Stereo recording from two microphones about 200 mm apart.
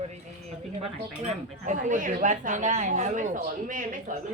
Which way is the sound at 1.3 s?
40° right (ahead or behind).